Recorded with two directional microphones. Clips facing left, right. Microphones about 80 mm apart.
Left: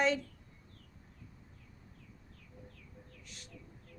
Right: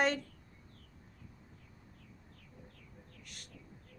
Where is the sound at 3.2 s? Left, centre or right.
Right.